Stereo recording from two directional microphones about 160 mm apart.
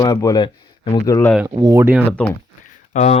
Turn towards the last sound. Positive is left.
turn(degrees=45)  # may be behind; listen again after turning